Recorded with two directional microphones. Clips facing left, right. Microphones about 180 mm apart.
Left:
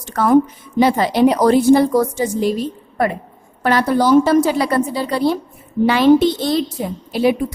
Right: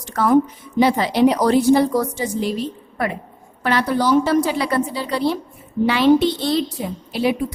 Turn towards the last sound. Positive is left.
turn(degrees=45)  # may be behind; listen again after turning